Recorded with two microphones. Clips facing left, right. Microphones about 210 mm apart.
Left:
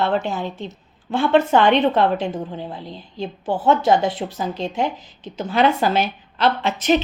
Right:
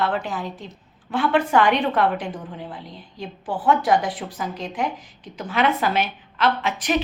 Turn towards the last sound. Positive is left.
turn(degrees=25)  # may be behind; listen again after turning